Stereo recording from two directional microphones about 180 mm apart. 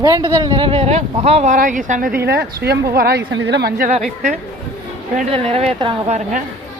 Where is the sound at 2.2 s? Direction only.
65° right (ahead or behind).